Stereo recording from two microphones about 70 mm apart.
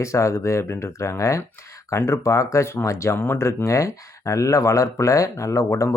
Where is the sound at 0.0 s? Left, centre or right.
Left.